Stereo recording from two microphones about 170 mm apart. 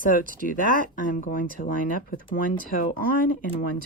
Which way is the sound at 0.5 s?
55° left (ahead or behind).